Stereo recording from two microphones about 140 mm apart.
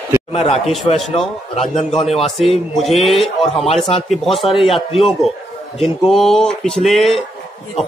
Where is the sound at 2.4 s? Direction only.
Centre (ahead or behind).